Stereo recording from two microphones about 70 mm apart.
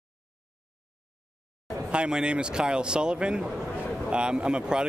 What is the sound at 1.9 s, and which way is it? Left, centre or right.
Speech, centre.